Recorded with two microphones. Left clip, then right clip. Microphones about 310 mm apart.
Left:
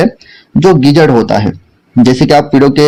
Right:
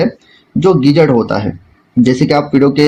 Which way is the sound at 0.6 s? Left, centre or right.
Left.